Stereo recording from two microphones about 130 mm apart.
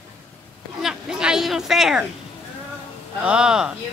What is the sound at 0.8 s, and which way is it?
Speech, 5° right (ahead or behind).